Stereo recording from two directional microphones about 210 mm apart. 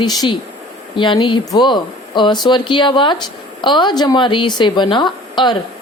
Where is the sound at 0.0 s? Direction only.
20° left (ahead or behind).